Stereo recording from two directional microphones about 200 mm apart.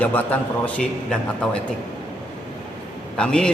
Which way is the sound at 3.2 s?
5° left (ahead or behind).